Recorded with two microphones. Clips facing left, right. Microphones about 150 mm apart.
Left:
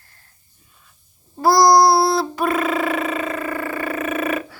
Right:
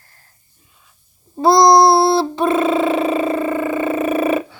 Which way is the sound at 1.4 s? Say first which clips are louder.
Right 3 dB; 20° right (ahead or behind).